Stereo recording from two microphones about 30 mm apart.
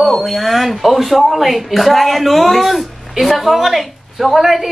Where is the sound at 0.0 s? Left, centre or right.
Centre.